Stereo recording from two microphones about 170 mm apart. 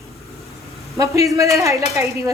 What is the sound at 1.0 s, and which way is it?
Speech, 20° right (ahead or behind).